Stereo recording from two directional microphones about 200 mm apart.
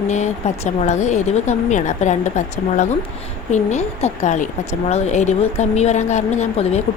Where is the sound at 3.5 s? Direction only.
35° left (ahead or behind).